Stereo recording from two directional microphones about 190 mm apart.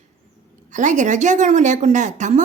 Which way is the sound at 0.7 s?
40° right (ahead or behind).